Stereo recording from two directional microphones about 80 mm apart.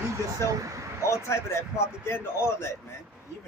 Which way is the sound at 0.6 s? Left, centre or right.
Right.